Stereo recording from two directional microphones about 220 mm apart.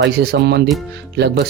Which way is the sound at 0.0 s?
50° right (ahead or behind).